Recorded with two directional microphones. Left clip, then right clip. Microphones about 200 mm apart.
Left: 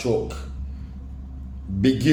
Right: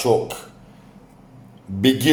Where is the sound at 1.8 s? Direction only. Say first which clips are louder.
Right 3 dB; 5° left (ahead or behind).